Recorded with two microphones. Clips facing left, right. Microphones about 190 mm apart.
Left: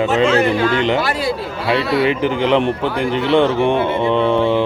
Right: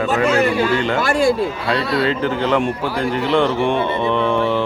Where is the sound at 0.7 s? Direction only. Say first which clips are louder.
Left 2 dB; 20° left (ahead or behind).